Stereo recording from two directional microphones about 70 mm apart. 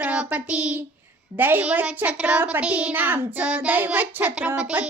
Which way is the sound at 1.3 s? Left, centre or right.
Right.